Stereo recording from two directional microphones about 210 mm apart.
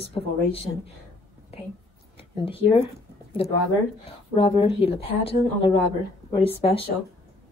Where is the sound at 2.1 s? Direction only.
25° left (ahead or behind).